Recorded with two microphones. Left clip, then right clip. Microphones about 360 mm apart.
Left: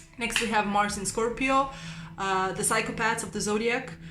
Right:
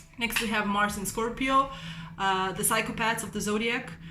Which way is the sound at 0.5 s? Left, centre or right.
Centre.